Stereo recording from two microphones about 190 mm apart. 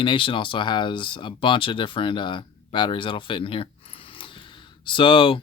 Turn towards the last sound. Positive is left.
turn(degrees=25)  # may be behind; listen again after turning